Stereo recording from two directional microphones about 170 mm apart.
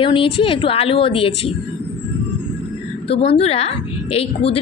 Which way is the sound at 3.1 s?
35° left (ahead or behind).